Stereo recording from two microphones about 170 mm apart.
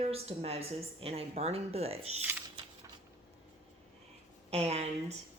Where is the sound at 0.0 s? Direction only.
35° right (ahead or behind).